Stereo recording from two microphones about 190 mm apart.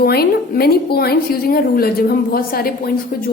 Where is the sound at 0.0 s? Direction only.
55° left (ahead or behind).